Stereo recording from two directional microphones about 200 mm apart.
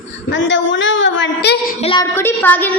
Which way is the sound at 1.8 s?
25° left (ahead or behind).